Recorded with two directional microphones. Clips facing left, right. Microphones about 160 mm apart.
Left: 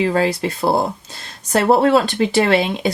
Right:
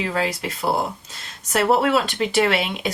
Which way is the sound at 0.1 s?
35° left (ahead or behind).